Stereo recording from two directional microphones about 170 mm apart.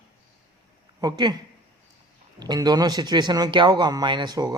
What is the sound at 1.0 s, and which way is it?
Speech, 25° right (ahead or behind).